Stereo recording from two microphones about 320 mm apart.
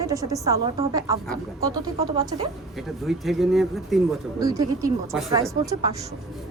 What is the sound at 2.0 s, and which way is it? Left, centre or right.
Speech, centre.